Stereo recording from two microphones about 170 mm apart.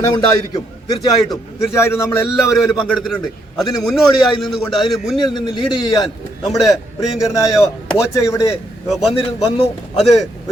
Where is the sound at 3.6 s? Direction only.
Centre (ahead or behind).